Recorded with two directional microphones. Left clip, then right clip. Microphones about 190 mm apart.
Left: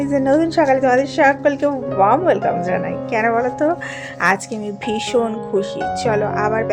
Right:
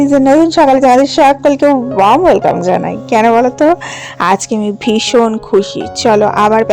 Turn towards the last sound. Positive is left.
turn(degrees=-40)  # may be behind; listen again after turning